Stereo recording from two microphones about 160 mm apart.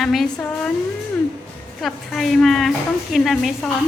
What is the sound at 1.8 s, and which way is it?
A woman's voice, centre (ahead or behind).